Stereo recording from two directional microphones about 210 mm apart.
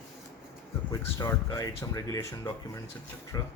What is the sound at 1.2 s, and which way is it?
Speech, 15° left (ahead or behind).